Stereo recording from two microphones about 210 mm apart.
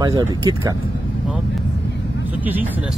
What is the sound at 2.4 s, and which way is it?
Speech, 10° right (ahead or behind).